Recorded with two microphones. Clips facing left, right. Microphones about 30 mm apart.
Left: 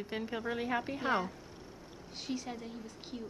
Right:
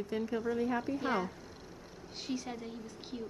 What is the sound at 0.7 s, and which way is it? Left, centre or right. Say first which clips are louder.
Speech: right 1 dB; left.